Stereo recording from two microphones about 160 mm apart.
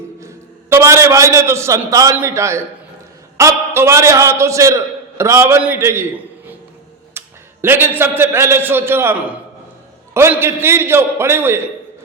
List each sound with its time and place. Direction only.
0.2 s a man's voice: 20° right (ahead or behind)
7.1 s a man's voice: 15° right (ahead or behind)